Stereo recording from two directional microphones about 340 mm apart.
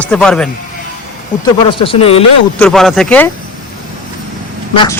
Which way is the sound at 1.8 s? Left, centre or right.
Centre.